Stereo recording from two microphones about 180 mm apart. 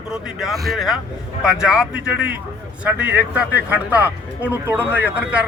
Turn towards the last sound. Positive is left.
turn(degrees=-10)  # may be behind; listen again after turning